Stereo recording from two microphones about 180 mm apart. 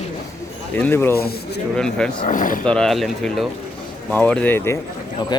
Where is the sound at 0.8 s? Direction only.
10° left (ahead or behind).